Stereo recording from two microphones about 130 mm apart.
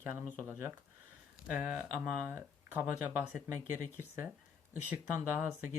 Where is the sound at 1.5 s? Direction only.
10° right (ahead or behind).